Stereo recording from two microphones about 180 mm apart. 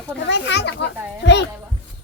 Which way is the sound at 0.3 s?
70° left (ahead or behind).